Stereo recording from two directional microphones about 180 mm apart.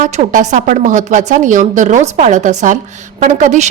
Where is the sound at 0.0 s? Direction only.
45° right (ahead or behind).